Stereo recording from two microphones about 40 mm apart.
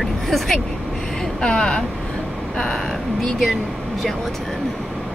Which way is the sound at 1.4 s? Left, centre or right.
Left.